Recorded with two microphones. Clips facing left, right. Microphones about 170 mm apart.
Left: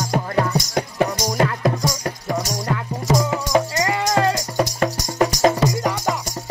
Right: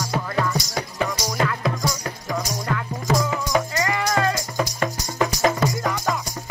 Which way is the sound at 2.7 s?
20° left (ahead or behind).